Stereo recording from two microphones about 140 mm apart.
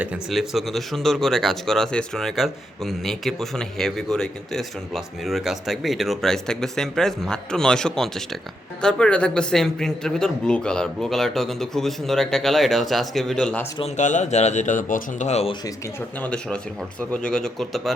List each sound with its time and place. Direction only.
0.0 s speech: 5° right (ahead or behind)
13.9 s speech: 60° left (ahead or behind)
15.3 s speech: 50° left (ahead or behind)
16.2 s speech: 5° left (ahead or behind)